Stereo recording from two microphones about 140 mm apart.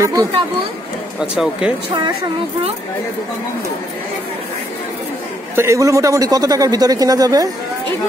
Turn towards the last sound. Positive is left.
turn(degrees=-25)  # may be behind; listen again after turning